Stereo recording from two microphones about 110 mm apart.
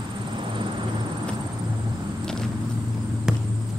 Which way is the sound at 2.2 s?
5° left (ahead or behind).